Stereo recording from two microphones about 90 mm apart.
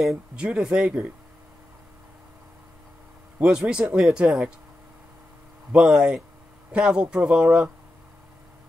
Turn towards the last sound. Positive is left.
turn(degrees=-10)  # may be behind; listen again after turning